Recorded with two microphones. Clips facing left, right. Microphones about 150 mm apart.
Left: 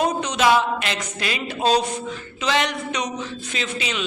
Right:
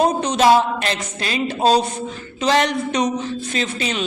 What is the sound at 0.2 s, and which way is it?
Mantra, 35° right (ahead or behind).